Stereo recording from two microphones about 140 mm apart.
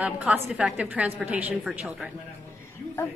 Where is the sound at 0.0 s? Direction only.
10° right (ahead or behind).